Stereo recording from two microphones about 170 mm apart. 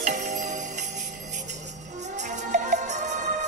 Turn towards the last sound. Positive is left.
turn(degrees=-45)  # may be behind; listen again after turning